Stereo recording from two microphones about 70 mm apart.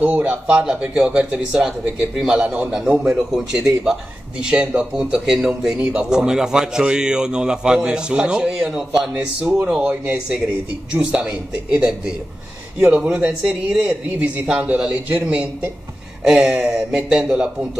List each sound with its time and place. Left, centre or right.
0.0 s a man's voice: right